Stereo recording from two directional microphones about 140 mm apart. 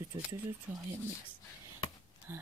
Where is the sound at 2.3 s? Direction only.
15° right (ahead or behind).